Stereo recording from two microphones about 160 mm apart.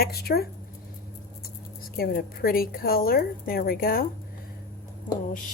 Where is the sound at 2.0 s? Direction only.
70° left (ahead or behind).